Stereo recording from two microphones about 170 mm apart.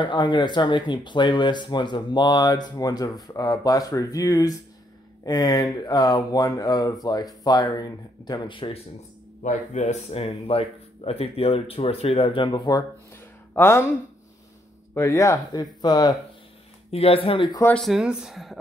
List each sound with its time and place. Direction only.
0.0 s speech: 25° left (ahead or behind)
9.4 s speech: 45° left (ahead or behind); by 13.9 s 15° left (ahead or behind)
15.0 s speech: 15° left (ahead or behind)
16.9 s speech: 35° left (ahead or behind)
17.7 s speech: centre (ahead or behind)